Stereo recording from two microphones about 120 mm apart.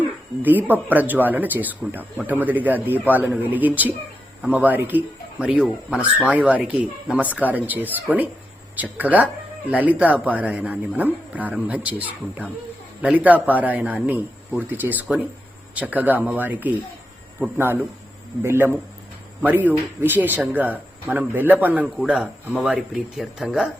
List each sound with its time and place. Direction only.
0.0 s a man's voice: 15° right (ahead or behind)